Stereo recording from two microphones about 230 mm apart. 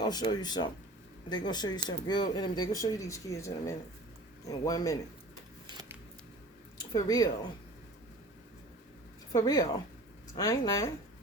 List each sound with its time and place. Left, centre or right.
0.0 s speech: centre
5.6 s a sound: centre
6.9 s speech: centre
9.3 s speech: centre